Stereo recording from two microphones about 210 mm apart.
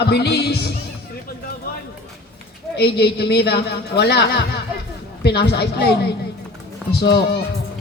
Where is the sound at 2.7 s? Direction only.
50° left (ahead or behind).